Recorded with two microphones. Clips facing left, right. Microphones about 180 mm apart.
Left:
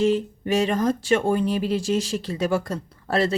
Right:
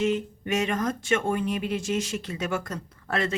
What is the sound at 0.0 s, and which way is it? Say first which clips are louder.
Speech: left 5 dB; 35° left (ahead or behind).